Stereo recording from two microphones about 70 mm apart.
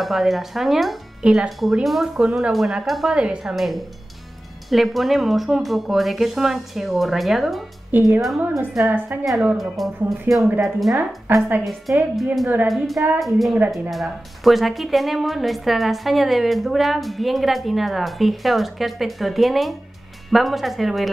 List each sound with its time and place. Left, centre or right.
0.0 s a woman's voice: centre
1.2 s a woman's voice: centre
1.6 s a woman's voice: centre
3.2 s a woman's voice: centre
3.5 s a woman's voice: centre
7.9 s speech: right
9.1 s speech: right
9.6 s a woman's voice: centre
11.3 s a woman's voice: right
11.6 s a woman's voice: centre